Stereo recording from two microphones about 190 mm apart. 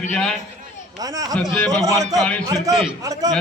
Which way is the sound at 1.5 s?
5° left (ahead or behind).